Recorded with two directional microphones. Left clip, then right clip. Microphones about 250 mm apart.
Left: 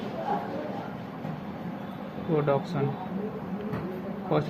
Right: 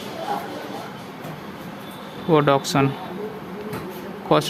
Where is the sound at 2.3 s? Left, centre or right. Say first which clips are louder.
Right 9 dB; right.